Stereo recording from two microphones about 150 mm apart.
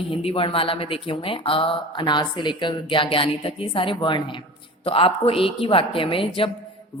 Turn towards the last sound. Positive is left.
turn(degrees=35)  # may be behind; listen again after turning